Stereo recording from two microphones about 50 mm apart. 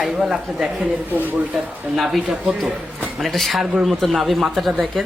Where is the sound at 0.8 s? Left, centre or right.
Right.